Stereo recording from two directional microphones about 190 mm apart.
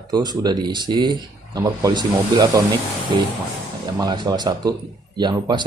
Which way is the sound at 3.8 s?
20° right (ahead or behind).